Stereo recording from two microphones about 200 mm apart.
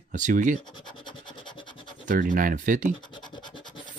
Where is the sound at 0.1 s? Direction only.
40° right (ahead or behind).